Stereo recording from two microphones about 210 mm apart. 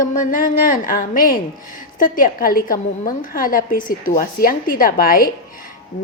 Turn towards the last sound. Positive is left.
turn(degrees=40)  # may be behind; listen again after turning